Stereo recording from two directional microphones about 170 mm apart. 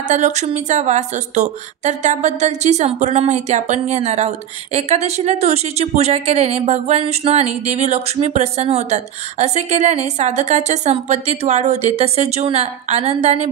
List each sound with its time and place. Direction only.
0.1 s speech: 45° right (ahead or behind)